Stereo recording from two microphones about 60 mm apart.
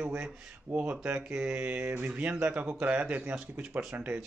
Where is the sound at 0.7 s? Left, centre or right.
Right.